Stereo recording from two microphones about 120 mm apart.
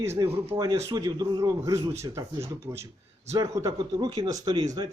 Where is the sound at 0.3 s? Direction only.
25° right (ahead or behind).